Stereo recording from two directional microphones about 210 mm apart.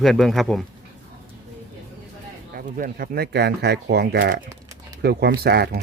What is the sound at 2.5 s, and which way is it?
Speech, 45° right (ahead or behind).